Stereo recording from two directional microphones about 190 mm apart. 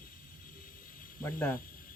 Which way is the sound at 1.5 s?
50° left (ahead or behind).